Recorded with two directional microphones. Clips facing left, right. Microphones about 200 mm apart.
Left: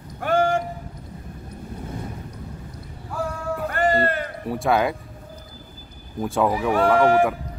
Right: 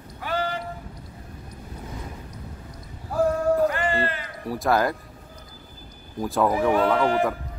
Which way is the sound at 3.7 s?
45° left (ahead or behind).